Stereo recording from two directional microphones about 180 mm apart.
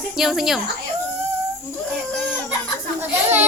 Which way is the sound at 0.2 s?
Centre (ahead or behind).